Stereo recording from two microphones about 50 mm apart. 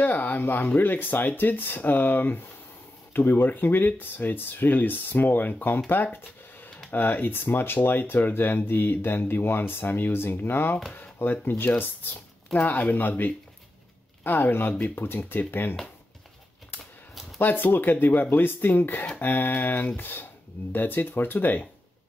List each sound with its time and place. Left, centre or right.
0.0 s speech: left
17.4 s speech: left